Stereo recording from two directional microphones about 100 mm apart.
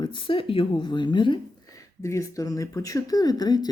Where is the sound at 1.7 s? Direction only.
30° left (ahead or behind).